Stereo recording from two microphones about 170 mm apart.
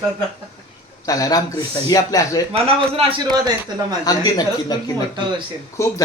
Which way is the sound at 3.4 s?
25° right (ahead or behind).